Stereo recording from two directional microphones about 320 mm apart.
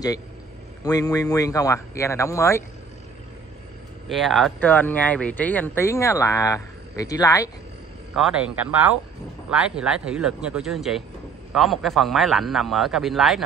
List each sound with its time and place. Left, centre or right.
0.8 s speech: centre
4.1 s speech: centre
8.1 s speech: centre